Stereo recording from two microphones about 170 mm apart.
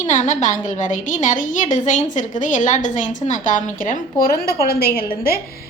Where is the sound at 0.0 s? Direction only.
45° left (ahead or behind).